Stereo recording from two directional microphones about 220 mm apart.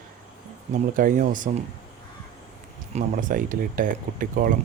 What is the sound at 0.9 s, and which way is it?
Speech, 40° right (ahead or behind).